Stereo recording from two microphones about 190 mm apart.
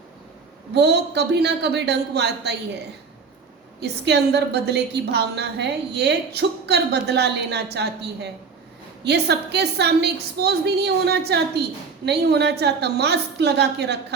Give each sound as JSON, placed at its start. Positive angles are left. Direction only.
{"t": 0.7, "sound": "a woman's voice", "side_deg": -60}
{"t": 3.8, "sound": "a woman's voice", "side_deg": -60}